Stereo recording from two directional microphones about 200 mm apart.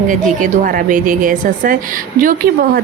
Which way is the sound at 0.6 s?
40° right (ahead or behind).